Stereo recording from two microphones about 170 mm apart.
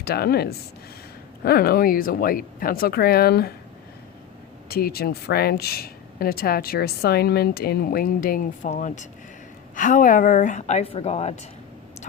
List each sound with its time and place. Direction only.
0.0 s speech: 65° left (ahead or behind)
4.7 s speech: 65° left (ahead or behind)
8.7 s a woman's voice: 45° left (ahead or behind)